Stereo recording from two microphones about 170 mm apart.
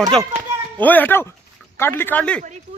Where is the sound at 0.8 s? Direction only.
10° left (ahead or behind).